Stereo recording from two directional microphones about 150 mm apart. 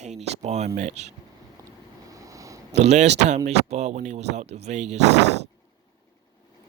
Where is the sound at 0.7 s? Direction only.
50° right (ahead or behind).